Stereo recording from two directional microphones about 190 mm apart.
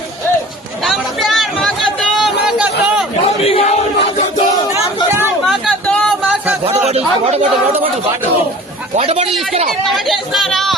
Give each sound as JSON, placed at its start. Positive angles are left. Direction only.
{"t": 0.9, "sound": "chatter", "side_deg": 0}
{"t": 3.4, "sound": "crowd", "side_deg": 30}
{"t": 5.5, "sound": "a sound", "side_deg": 0}
{"t": 6.7, "sound": "a sound", "side_deg": -35}
{"t": 9.0, "sound": "speech", "side_deg": -30}
{"t": 9.6, "sound": "speech", "side_deg": 0}